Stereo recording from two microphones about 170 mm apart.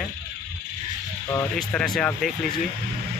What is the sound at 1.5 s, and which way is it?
Speech, 5° left (ahead or behind).